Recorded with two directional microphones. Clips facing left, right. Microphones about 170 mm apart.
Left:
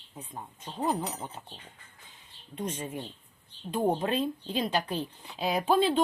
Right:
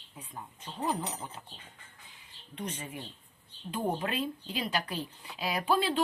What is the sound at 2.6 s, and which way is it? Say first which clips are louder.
Speech: left 5 dB; 25° left (ahead or behind).